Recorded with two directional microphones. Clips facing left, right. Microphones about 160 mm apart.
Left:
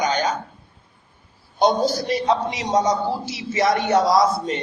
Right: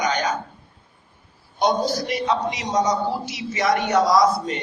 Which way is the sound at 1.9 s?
30° left (ahead or behind).